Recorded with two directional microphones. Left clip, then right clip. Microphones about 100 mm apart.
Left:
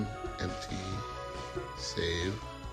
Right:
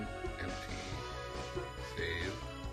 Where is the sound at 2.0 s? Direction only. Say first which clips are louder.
Left 5 dB; 20° left (ahead or behind).